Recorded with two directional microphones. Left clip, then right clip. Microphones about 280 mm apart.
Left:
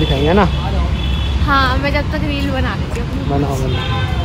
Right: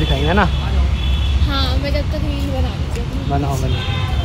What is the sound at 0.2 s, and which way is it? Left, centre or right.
Speech, centre.